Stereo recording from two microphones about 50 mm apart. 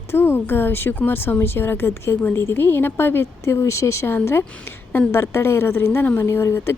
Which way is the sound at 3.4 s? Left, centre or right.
Left.